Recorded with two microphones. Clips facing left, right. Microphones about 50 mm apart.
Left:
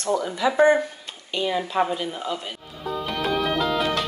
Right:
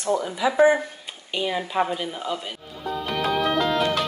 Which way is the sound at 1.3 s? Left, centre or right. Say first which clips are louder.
Left 1 dB; centre.